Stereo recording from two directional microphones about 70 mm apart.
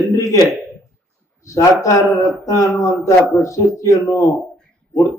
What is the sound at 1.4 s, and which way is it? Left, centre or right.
A man's voice, left.